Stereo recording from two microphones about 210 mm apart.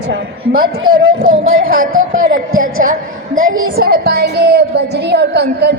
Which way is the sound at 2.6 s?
40° right (ahead or behind).